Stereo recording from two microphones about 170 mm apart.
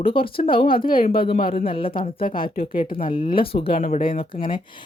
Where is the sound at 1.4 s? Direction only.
35° left (ahead or behind).